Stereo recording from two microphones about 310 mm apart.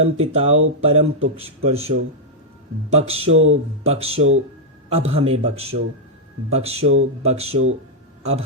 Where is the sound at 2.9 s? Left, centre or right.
Centre.